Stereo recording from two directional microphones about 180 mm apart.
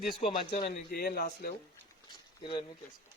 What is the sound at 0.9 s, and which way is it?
Speech, 60° left (ahead or behind).